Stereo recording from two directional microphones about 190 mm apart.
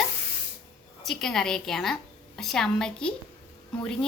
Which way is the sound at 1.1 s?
Centre (ahead or behind).